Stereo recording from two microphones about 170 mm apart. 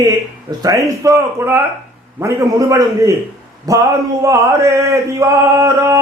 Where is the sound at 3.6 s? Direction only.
20° right (ahead or behind).